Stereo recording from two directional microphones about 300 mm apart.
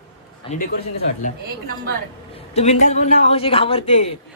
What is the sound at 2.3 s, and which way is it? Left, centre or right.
Speech, left.